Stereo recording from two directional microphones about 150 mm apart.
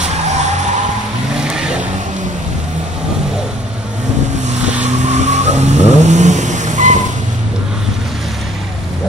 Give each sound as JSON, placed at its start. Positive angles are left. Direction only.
{"t": 0.0, "sound": "vehicle", "side_deg": -50}
{"t": 1.4, "sound": "vehicle", "side_deg": -5}
{"t": 4.8, "sound": "vehicle", "side_deg": -50}